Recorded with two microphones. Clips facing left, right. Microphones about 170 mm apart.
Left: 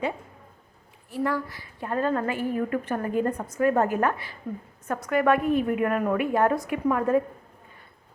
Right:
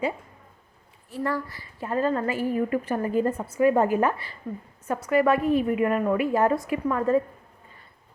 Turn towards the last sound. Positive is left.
turn(degrees=5)  # may be behind; listen again after turning